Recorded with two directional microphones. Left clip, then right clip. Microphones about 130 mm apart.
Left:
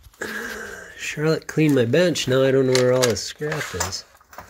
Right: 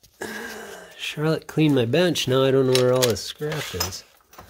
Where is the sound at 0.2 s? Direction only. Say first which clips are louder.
Left 4 dB; 25° right (ahead or behind).